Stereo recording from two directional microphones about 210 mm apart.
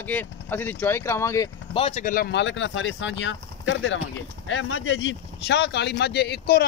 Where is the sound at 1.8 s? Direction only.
30° left (ahead or behind); by 6.6 s 50° left (ahead or behind).